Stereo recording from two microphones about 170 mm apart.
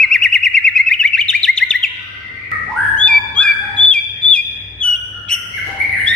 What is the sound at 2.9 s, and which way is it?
Bird, 5° left (ahead or behind).